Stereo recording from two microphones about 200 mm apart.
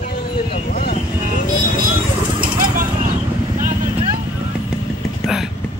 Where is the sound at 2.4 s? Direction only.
45° right (ahead or behind).